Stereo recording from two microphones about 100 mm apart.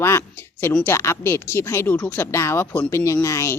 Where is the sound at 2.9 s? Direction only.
30° left (ahead or behind).